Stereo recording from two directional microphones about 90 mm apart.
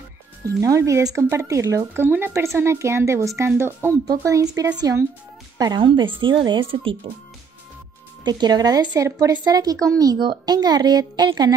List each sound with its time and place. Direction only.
0.6 s speech: 35° right (ahead or behind)
2.0 s speech: 25° right (ahead or behind)
2.3 s speech: 35° right (ahead or behind)
4.1 s speech: 40° right (ahead or behind)
5.8 s a woman's voice: 70° right (ahead or behind)
8.2 s speech: 55° right (ahead or behind)
10.1 s speech: 60° right (ahead or behind)